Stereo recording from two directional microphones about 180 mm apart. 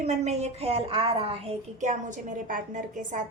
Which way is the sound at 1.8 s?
45° right (ahead or behind).